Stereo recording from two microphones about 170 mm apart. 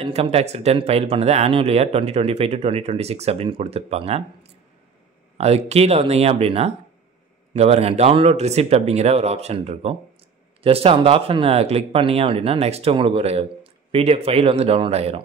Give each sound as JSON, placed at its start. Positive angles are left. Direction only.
{"t": 0.0, "sound": "speech", "side_deg": -35}